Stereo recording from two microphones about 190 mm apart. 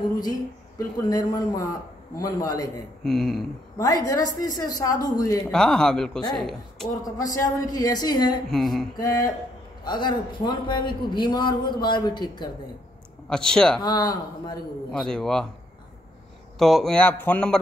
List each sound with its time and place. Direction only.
0.7 s a man's voice: 20° left (ahead or behind)
3.0 s a man's voice: centre (ahead or behind)
3.7 s a man's voice: 20° left (ahead or behind)
5.5 s a man's voice: 5° left (ahead or behind)
7.0 s a man's voice: 20° left (ahead or behind)
8.5 s a man's voice: centre (ahead or behind)
8.9 s a man's voice: 20° left (ahead or behind)
13.3 s a man's voice: 5° left (ahead or behind)
13.7 s a man's voice: 20° left (ahead or behind)
14.9 s a man's voice: 5° left (ahead or behind)
16.5 s a man's voice: centre (ahead or behind)